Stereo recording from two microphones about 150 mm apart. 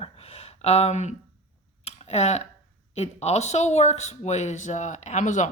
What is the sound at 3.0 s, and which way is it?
Speech, 45° left (ahead or behind).